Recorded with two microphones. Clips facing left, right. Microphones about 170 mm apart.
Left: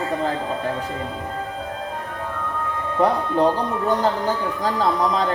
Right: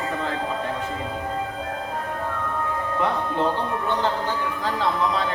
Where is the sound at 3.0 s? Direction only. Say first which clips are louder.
Left 6 dB; 40° left (ahead or behind).